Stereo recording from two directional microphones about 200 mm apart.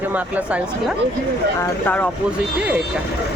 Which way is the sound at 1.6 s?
10° left (ahead or behind).